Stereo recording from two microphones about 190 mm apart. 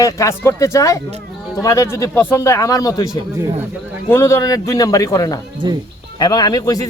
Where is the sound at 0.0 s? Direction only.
15° left (ahead or behind).